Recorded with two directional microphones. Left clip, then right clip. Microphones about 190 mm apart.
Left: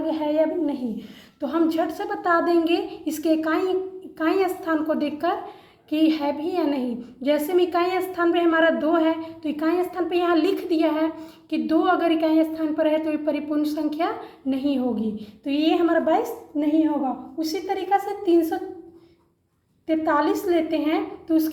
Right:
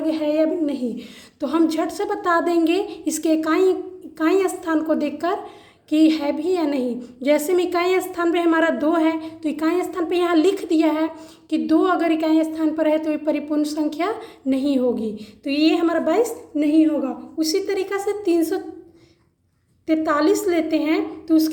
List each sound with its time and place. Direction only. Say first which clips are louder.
0.0 s a sound: right 2 dB; 35° right (ahead or behind)
1.4 s a woman's voice: right 2 dB; 35° right (ahead or behind)
19.9 s a woman's voice: right 3 dB; 40° right (ahead or behind)